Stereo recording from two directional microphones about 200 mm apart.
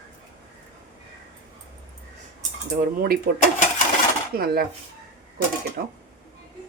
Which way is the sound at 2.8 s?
45° right (ahead or behind).